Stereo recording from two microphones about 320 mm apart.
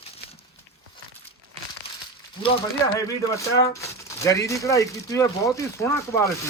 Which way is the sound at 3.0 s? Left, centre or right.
Centre.